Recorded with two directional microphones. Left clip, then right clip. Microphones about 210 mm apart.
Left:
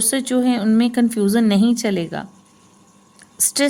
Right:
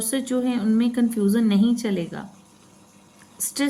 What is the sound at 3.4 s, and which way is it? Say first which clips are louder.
Speech: left 8 dB; 50° left (ahead or behind).